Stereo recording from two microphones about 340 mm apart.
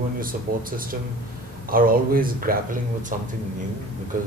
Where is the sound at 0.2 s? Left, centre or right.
Right.